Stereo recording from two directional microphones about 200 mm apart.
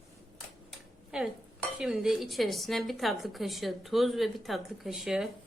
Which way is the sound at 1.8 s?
Centre (ahead or behind).